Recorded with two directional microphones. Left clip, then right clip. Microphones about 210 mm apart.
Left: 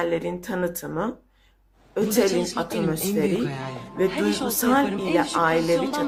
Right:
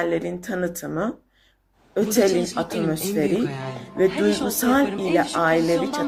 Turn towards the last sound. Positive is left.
turn(degrees=0)  # may be behind; listen again after turning